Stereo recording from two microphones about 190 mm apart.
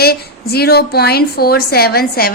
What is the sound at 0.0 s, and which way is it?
A woman's voice, 55° left (ahead or behind).